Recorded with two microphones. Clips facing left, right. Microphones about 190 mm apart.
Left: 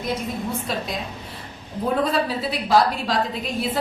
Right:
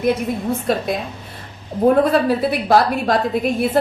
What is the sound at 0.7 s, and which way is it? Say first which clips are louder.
A woman's voice: right 7 dB; 55° right (ahead or behind).